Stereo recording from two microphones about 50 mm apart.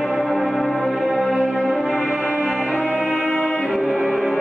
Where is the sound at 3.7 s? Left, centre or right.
Centre.